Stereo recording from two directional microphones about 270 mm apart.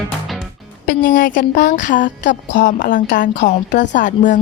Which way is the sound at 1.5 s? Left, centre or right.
Left.